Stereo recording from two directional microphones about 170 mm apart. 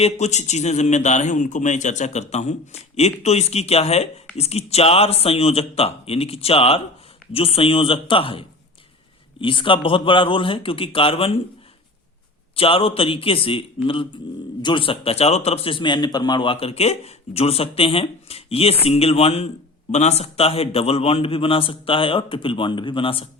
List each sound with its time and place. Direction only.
0.0 s a man's voice: 40° left (ahead or behind)
12.5 s a man's voice: 35° left (ahead or behind)